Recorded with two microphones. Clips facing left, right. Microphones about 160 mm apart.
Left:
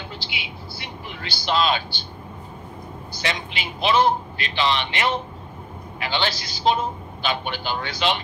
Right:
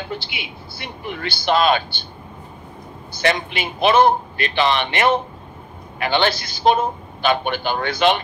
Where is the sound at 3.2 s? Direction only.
55° right (ahead or behind).